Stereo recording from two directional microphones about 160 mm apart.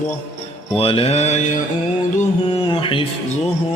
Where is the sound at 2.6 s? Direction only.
35° left (ahead or behind).